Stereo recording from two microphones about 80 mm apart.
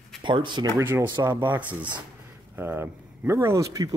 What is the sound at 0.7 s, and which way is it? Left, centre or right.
Speech, right.